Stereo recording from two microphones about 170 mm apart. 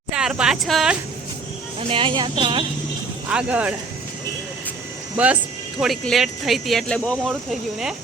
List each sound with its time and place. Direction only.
0.1 s speech: 5° right (ahead or behind)
1.9 s speech: 30° right (ahead or behind)
3.2 s speech: 10° right (ahead or behind)
5.1 s speech: 10° right (ahead or behind)